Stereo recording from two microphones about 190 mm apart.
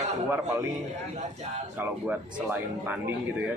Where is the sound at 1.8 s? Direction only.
10° right (ahead or behind).